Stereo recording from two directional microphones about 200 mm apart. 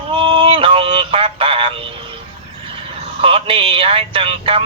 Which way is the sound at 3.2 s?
25° right (ahead or behind).